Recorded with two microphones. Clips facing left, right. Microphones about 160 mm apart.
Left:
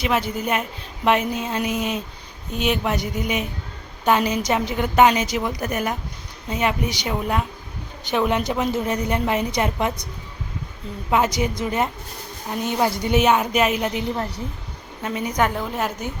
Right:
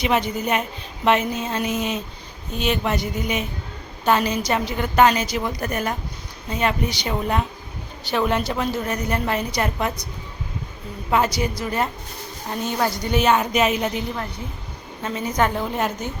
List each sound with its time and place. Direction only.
0.0 s a woman's voice: 5° left (ahead or behind)
11.1 s a woman's voice: 15° left (ahead or behind)
13.3 s speech: 5° left (ahead or behind)
15.0 s a woman's voice: 15° left (ahead or behind)
15.5 s speech: centre (ahead or behind)